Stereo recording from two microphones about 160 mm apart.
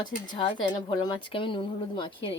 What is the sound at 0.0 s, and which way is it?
Speech, 30° left (ahead or behind).